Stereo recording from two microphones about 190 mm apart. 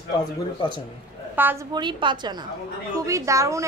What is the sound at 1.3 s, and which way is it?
Speech, 10° right (ahead or behind).